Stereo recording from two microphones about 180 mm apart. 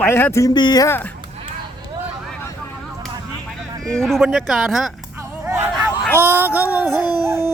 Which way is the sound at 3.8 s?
5° left (ahead or behind).